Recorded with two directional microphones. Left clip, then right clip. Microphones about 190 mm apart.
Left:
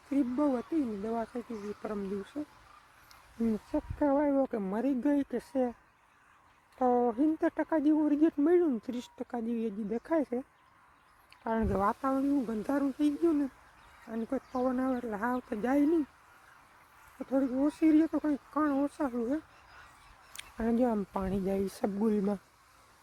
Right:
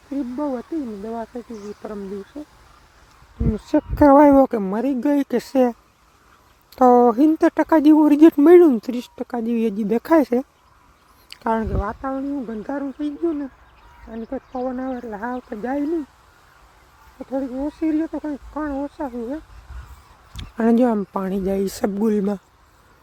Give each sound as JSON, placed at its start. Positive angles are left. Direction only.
{"t": 0.3, "sound": "speech", "side_deg": 5}
{"t": 3.7, "sound": "speech", "side_deg": -55}
{"t": 4.5, "sound": "speech", "side_deg": -20}
{"t": 6.7, "sound": "speech", "side_deg": -50}
{"t": 11.7, "sound": "speech", "side_deg": 30}
{"t": 12.0, "sound": "speech", "side_deg": 10}
{"t": 17.2, "sound": "speech", "side_deg": 10}
{"t": 20.6, "sound": "speech", "side_deg": -35}